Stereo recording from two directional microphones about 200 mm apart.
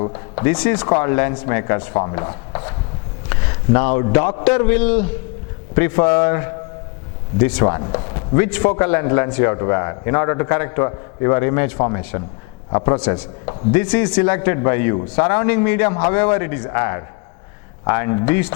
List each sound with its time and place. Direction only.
0.3 s a man's voice: 10° left (ahead or behind)
3.2 s a sound: 15° left (ahead or behind)
4.1 s a man's voice: 15° left (ahead or behind)
7.6 s a man's voice: 20° left (ahead or behind)
7.9 s a sound: 20° left (ahead or behind)
8.6 s a man's voice: 20° left (ahead or behind)
13.0 s a man's voice: 10° left (ahead or behind)
13.4 s speech: 25° left (ahead or behind)
13.7 s a man's voice: 10° left (ahead or behind)